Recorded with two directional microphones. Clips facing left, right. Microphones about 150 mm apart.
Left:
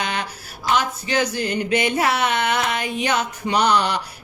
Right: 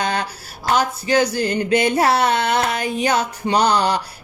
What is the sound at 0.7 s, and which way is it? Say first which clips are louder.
Speech: right 3 dB; 35° right (ahead or behind).